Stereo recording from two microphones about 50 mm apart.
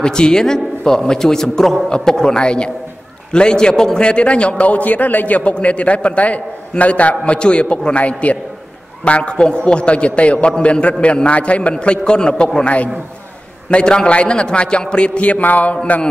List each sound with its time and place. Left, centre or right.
0.0 s a man's voice: centre
12.6 s a man's voice: left